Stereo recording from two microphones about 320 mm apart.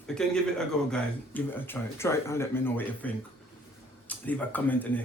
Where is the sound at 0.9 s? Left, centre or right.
Centre.